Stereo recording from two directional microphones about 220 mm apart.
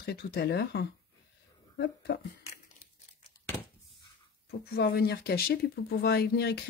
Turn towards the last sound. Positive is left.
turn(degrees=50)  # may be behind; listen again after turning